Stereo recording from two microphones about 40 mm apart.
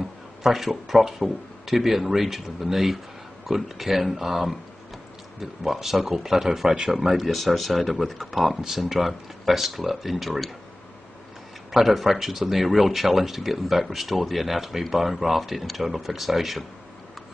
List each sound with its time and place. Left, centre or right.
0.4 s speech: centre
11.7 s speech: centre